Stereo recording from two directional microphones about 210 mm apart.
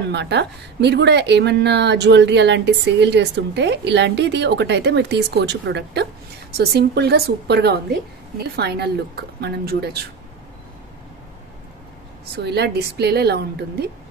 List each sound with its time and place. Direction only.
0.1 s a woman's voice: 55° right (ahead or behind)
12.4 s a woman's voice: 50° right (ahead or behind)